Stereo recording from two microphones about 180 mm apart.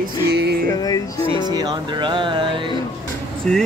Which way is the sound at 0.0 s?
65° right (ahead or behind).